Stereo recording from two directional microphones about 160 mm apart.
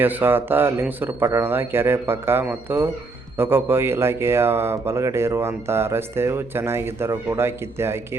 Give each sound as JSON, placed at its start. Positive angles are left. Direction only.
{"t": 0.0, "sound": "speech", "side_deg": -10}